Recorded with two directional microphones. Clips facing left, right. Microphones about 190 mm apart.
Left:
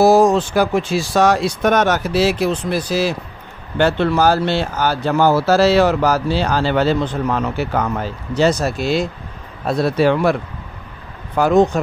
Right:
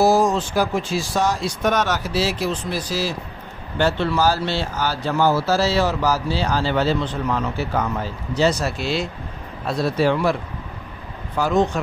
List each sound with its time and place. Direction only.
0.0 s speech: 65° left (ahead or behind)
8.4 s speech: 45° left (ahead or behind)
9.7 s speech: 60° left (ahead or behind)
11.3 s speech: 55° left (ahead or behind)